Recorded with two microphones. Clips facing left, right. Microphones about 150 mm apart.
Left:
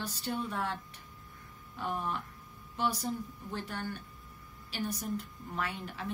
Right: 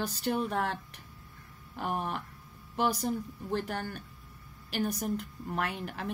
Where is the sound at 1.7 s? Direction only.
60° right (ahead or behind).